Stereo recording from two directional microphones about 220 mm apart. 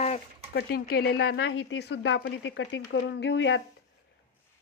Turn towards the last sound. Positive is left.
turn(degrees=55)  # may be behind; listen again after turning